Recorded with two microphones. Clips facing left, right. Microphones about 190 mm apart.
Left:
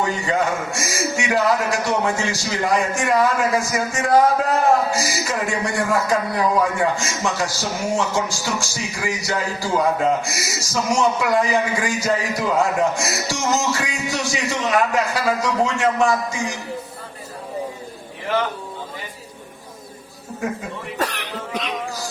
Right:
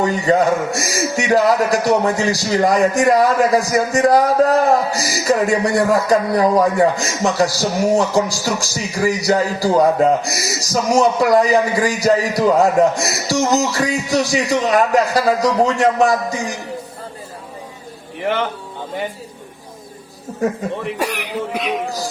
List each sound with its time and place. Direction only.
0.0 s a man's voice: 40° right (ahead or behind)
18.2 s a sound: 65° right (ahead or behind)
21.0 s cough: 10° right (ahead or behind)